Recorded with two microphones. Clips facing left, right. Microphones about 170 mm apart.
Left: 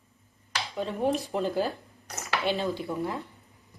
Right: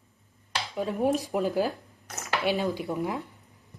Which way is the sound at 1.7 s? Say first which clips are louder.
Right 1 dB; centre (ahead or behind).